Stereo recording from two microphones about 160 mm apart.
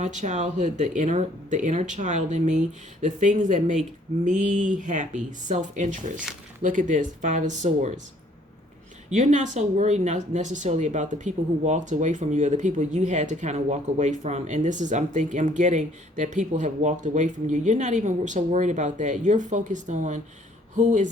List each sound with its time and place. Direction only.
0.0 s speech: 50° right (ahead or behind)
9.0 s speech: 50° right (ahead or behind)